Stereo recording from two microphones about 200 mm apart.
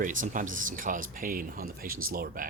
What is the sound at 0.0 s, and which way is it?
Speech, 40° right (ahead or behind).